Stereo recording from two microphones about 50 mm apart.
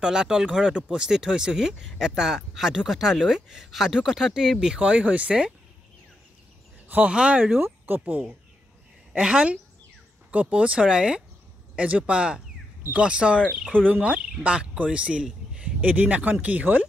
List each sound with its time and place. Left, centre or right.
0.0 s speech: centre
7.1 s speech: right
7.6 s speech: right
9.1 s speech: right
13.7 s speech: right
14.4 s speech: right
15.8 s speech: right